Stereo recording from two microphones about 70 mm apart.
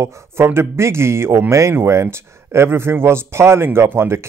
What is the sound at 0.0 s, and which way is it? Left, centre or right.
Speech, right.